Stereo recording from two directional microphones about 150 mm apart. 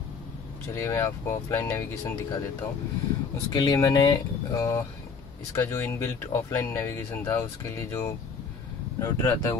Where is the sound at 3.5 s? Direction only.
25° left (ahead or behind).